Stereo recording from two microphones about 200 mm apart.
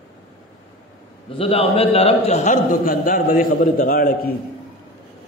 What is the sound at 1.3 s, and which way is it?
A man's voice, 30° left (ahead or behind).